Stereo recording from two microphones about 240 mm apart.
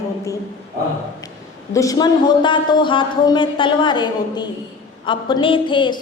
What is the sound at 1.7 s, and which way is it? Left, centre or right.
A woman's voice, centre.